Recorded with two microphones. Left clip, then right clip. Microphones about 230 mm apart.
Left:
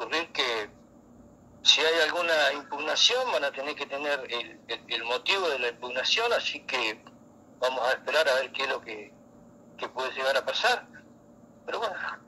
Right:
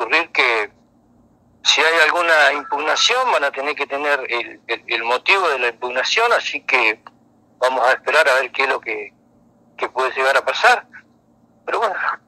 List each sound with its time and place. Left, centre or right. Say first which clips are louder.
0.0 s telephone: right 13 dB; right
1.6 s radio: right 8 dB; right
2.8 s speech: right 7 dB; right
11.8 s a sound: right 13 dB; right